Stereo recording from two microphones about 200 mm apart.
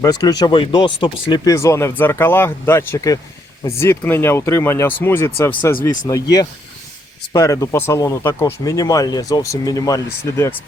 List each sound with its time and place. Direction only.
0.0 s speech: 20° left (ahead or behind)
7.3 s speech: 15° left (ahead or behind)